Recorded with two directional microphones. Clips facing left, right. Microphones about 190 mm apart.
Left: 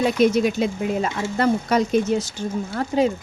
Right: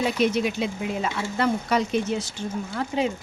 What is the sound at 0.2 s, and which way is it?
Speech, 40° left (ahead or behind).